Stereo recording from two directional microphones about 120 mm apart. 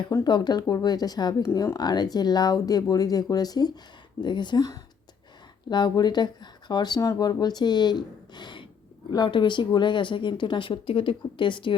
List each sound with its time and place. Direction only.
0.3 s speech: 35° left (ahead or behind)